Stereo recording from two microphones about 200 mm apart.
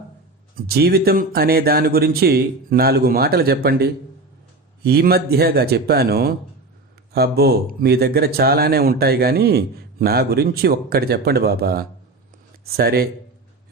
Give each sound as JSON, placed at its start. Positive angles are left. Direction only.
{"t": 0.5, "sound": "speech", "side_deg": -50}